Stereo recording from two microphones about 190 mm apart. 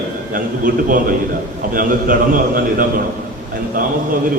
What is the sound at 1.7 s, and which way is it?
A man's voice, 45° right (ahead or behind).